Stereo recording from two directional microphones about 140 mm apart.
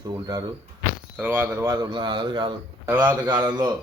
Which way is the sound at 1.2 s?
15° right (ahead or behind).